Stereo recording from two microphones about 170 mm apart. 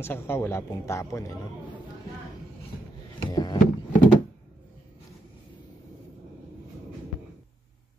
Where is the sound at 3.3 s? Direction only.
20° left (ahead or behind).